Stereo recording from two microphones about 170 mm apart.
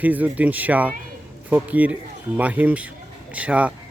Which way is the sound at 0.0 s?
10° right (ahead or behind).